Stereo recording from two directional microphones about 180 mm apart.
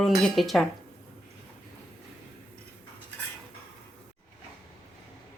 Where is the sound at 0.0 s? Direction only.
Centre (ahead or behind).